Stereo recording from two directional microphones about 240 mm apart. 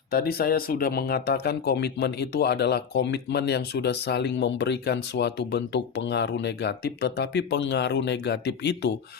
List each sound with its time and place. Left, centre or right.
0.1 s speech: left